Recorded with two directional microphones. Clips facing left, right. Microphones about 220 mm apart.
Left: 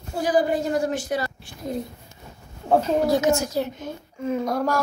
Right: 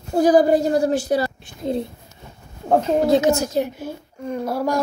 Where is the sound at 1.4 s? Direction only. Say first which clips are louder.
Right 5 dB; 25° right (ahead or behind).